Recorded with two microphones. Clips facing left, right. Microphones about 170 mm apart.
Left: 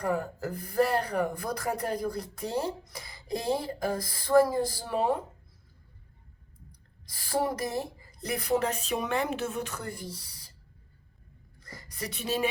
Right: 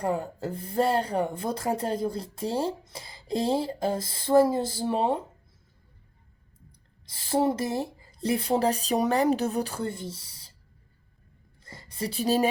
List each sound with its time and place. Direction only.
0.0 s speech: 25° right (ahead or behind)
6.7 s speech: 25° right (ahead or behind)
11.6 s a sound: 30° right (ahead or behind)